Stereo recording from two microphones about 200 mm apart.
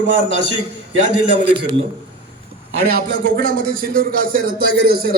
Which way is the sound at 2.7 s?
50° right (ahead or behind).